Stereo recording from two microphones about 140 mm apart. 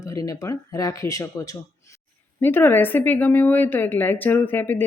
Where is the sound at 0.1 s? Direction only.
25° left (ahead or behind).